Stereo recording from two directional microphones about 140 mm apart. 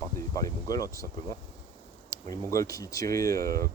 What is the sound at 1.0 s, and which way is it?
Speech, 70° right (ahead or behind).